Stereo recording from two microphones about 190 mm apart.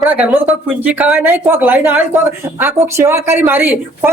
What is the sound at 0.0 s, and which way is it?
Speech, 10° right (ahead or behind).